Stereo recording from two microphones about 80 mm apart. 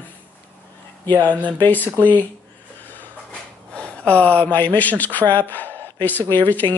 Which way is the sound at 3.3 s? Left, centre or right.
Centre.